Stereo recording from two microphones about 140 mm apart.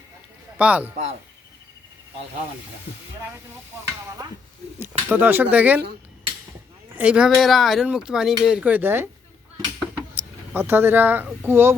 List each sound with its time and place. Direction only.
0.6 s speech: 10° right (ahead or behind)
3.7 s stir: 20° right (ahead or behind)
4.8 s speech: 15° right (ahead or behind)
6.9 s speech: 10° right (ahead or behind)